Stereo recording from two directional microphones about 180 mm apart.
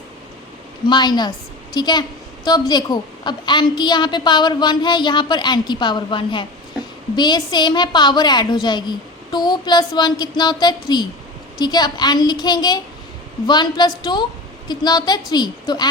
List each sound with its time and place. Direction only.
0.9 s a woman's voice: 25° left (ahead or behind)